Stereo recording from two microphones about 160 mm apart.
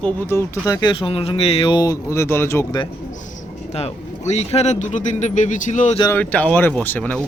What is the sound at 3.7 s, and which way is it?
A man's voice, 40° left (ahead or behind).